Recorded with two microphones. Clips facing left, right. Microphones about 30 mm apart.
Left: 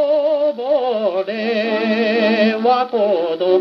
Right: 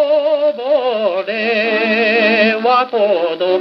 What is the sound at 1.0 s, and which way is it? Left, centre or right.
Music, right.